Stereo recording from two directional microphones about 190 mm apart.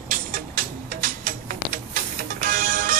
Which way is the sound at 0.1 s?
45° right (ahead or behind).